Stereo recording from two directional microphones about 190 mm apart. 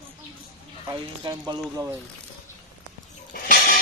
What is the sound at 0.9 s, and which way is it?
Speech, 20° right (ahead or behind).